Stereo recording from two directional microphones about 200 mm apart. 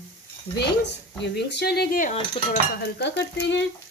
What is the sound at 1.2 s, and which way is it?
Speech, 60° left (ahead or behind).